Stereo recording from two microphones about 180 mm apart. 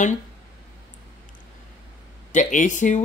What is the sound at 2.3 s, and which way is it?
Speech, 45° left (ahead or behind).